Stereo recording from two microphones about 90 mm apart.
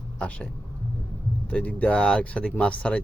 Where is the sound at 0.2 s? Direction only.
15° left (ahead or behind).